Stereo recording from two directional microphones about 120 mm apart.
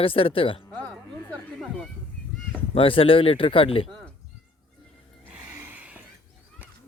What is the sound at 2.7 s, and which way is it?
Speech, 50° left (ahead or behind).